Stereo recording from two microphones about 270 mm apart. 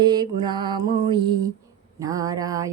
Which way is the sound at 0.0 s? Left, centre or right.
Centre.